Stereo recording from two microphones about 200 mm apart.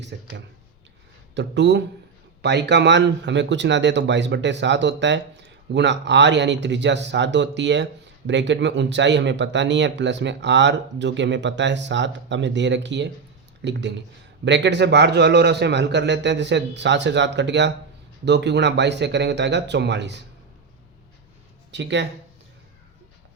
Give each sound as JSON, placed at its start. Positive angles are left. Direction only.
{"t": 0.0, "sound": "speech", "side_deg": -60}
{"t": 21.7, "sound": "speech", "side_deg": -60}